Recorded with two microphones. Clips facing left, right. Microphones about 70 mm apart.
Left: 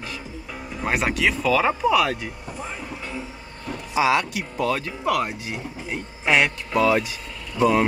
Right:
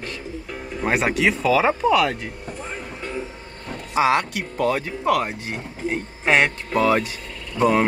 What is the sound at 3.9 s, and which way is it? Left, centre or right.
Speech, right.